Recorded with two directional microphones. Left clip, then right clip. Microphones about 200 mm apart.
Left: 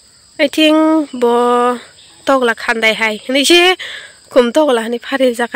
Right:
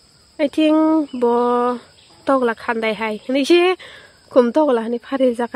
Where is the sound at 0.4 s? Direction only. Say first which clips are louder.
Left 5 dB; 5° left (ahead or behind).